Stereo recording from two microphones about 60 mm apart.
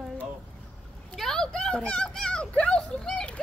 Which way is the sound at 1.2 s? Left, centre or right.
Centre.